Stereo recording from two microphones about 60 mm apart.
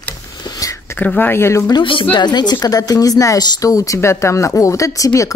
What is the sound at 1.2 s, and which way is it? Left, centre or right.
Speech, left.